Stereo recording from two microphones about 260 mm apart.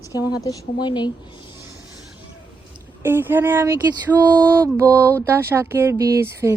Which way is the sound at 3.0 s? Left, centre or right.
Centre.